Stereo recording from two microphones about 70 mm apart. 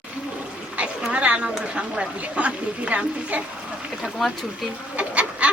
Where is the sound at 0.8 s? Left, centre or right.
Centre.